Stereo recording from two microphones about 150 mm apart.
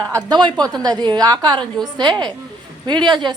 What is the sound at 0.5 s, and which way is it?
Speech, 5° left (ahead or behind).